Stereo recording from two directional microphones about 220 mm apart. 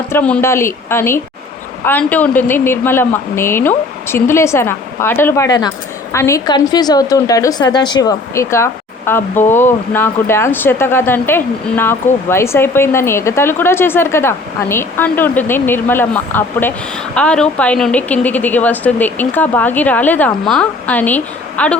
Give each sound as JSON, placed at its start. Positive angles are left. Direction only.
{"t": 0.1, "sound": "a woman's voice", "side_deg": 5}